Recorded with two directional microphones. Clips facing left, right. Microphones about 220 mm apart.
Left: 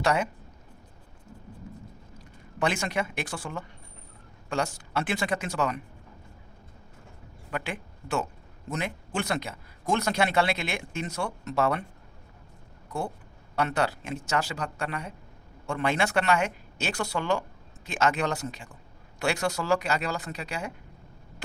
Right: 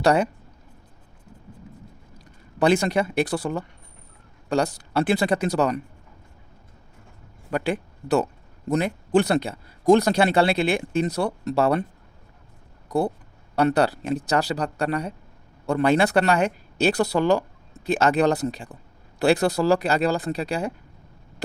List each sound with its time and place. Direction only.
0.0 s speech: 35° right (ahead or behind)
2.1 s speech: 35° right (ahead or behind)
7.5 s speech: 35° right (ahead or behind)
13.6 s speech: 35° right (ahead or behind)